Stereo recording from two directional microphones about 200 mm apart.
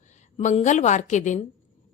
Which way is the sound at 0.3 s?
35° left (ahead or behind).